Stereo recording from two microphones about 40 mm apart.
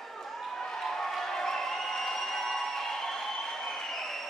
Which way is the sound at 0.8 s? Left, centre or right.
Centre.